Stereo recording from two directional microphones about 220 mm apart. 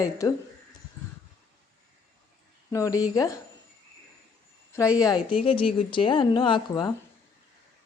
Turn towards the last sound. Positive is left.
turn(degrees=20)  # may be behind; listen again after turning